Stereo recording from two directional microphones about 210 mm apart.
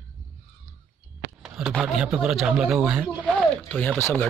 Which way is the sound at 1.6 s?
Centre (ahead or behind).